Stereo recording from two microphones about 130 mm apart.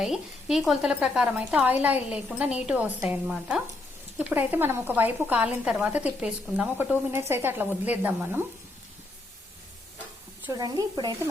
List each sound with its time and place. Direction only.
0.0 s speech: 5° right (ahead or behind)
10.5 s speech: 30° right (ahead or behind)